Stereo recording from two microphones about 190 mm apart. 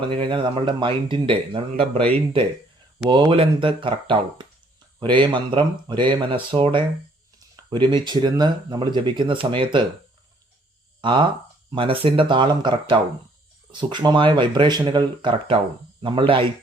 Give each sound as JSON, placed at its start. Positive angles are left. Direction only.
{"t": 0.1, "sound": "speech", "side_deg": -25}
{"t": 3.1, "sound": "speech", "side_deg": -25}
{"t": 4.9, "sound": "speech", "side_deg": -25}
{"t": 11.0, "sound": "speech", "side_deg": -25}